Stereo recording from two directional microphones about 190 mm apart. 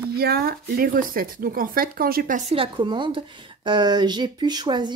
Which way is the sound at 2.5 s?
25° right (ahead or behind).